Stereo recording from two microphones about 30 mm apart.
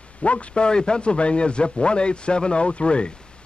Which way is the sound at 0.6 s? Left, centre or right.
Left.